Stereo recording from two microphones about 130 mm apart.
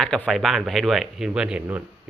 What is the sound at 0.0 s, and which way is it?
Speech, 5° left (ahead or behind).